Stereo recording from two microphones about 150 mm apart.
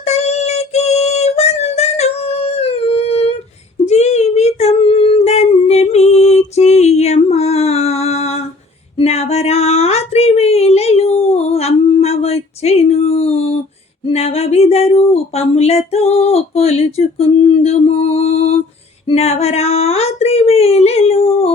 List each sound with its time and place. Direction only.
0.0 s child singing: 45° left (ahead or behind)
3.8 s humming: 50° left (ahead or behind)
9.0 s a sound: 45° left (ahead or behind)